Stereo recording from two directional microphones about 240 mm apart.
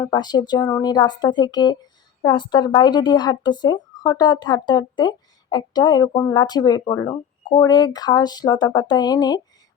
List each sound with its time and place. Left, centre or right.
0.0 s a woman's voice: centre